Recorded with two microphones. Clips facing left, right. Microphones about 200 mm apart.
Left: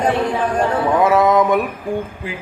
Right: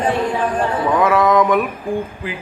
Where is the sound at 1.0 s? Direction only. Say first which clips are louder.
Even; 25° left (ahead or behind).